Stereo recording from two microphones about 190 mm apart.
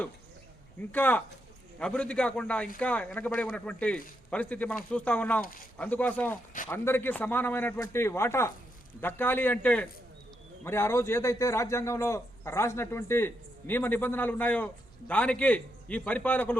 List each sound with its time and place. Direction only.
0.9 s a man's voice: 10° left (ahead or behind)
5.4 s speech: 50° left (ahead or behind)
5.7 s a man's voice: 5° left (ahead or behind)